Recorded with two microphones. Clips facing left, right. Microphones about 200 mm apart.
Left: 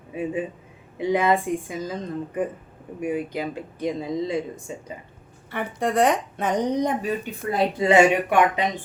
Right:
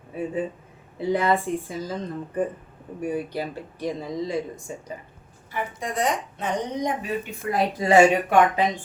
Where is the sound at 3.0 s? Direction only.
15° left (ahead or behind).